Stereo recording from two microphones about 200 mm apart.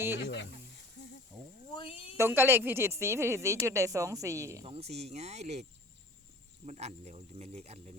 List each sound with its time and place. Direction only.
0.2 s speech: 60° left (ahead or behind)
1.3 s a sound: centre (ahead or behind)
1.7 s a sound: 25° left (ahead or behind)
2.1 s speech: 10° right (ahead or behind)
4.6 s speech: 30° right (ahead or behind)
6.7 s speech: 35° right (ahead or behind)